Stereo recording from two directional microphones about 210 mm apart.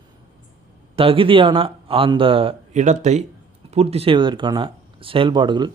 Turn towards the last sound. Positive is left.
turn(degrees=-20)  # may be behind; listen again after turning